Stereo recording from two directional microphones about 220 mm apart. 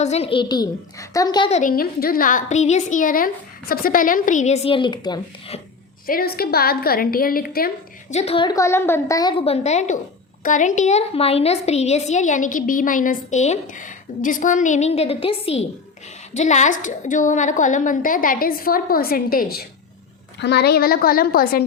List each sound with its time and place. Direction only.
0.0 s a woman's voice: 30° left (ahead or behind)
6.1 s a woman's voice: 40° left (ahead or behind)
8.1 s a woman's voice: 30° left (ahead or behind)
9.4 s a woman's voice: 30° left (ahead or behind)